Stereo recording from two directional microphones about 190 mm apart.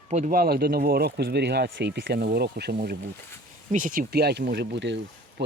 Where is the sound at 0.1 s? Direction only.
45° right (ahead or behind).